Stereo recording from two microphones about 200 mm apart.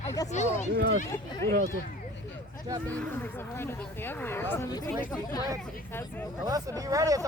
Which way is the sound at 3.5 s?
10° left (ahead or behind).